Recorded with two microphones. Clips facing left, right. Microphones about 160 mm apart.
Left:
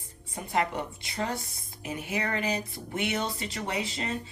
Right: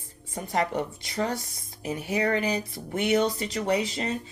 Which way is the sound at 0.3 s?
40° right (ahead or behind).